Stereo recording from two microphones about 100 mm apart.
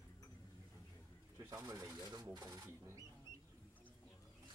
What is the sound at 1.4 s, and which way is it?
Speech, 35° right (ahead or behind).